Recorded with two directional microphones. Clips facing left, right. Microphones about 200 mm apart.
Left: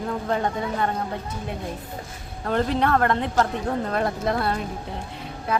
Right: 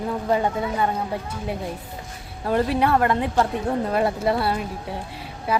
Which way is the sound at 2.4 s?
10° right (ahead or behind).